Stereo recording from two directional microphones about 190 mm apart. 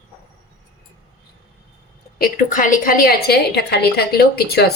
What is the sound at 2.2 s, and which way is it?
A woman's voice, 45° left (ahead or behind).